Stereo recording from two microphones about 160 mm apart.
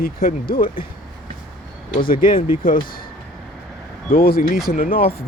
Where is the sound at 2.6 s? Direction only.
60° left (ahead or behind).